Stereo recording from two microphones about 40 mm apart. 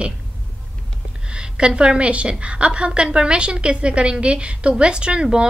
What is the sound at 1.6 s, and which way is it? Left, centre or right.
A woman's voice, right.